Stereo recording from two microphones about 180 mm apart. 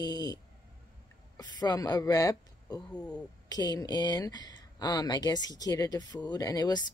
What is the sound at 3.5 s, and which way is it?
Speech, 20° left (ahead or behind).